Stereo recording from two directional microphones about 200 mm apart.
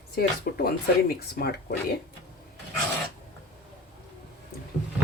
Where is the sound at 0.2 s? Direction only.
50° left (ahead or behind).